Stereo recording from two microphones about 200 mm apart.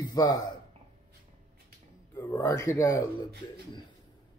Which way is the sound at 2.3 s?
15° left (ahead or behind).